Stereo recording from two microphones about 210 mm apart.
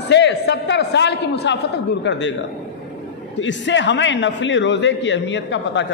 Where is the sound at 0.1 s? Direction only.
55° left (ahead or behind).